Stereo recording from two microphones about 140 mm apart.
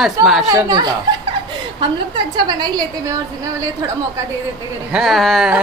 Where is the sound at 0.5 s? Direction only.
25° right (ahead or behind).